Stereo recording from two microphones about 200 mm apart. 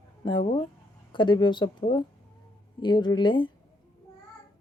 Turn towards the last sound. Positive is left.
turn(degrees=25)  # may be behind; listen again after turning